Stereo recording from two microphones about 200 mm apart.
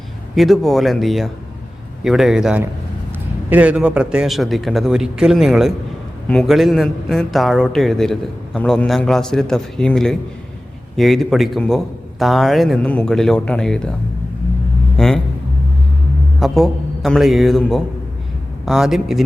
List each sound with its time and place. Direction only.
0.3 s a man's voice: centre (ahead or behind)
14.9 s vehicle: centre (ahead or behind)
16.4 s a man's voice: centre (ahead or behind)